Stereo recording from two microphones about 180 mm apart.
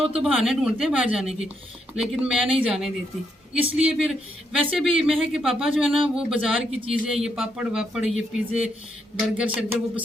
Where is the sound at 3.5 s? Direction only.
5° right (ahead or behind).